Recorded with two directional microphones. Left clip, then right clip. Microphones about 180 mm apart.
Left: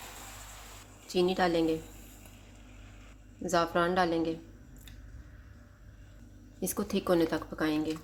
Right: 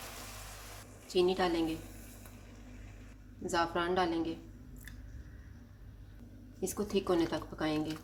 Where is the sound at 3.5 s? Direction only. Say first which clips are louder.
Left 4 dB; 45° left (ahead or behind).